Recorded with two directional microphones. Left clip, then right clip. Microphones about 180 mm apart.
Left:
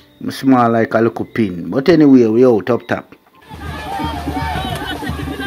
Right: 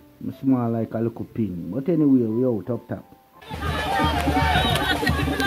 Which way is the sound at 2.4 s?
25° left (ahead or behind).